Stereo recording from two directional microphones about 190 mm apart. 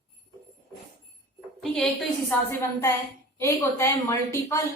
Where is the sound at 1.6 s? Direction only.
Centre (ahead or behind).